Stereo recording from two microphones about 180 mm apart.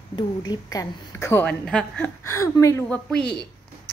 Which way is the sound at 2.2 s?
15° left (ahead or behind).